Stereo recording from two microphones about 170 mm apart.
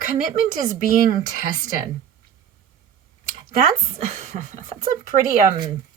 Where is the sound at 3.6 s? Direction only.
45° right (ahead or behind).